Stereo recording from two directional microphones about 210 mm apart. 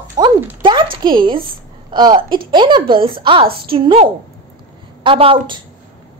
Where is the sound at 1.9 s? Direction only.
20° right (ahead or behind).